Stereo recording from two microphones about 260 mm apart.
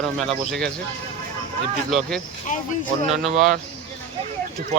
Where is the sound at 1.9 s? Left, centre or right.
Centre.